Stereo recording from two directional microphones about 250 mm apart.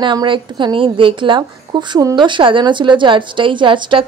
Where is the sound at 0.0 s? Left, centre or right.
Centre.